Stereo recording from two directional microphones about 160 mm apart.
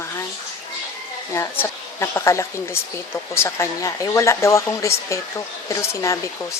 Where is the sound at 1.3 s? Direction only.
15° left (ahead or behind).